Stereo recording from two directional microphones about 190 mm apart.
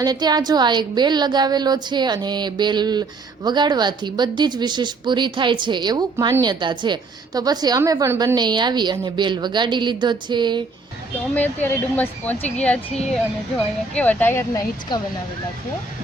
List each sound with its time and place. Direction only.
0.0 s a woman's voice: 20° right (ahead or behind)
11.3 s speech: 10° left (ahead or behind)
14.9 s speech: 20° left (ahead or behind)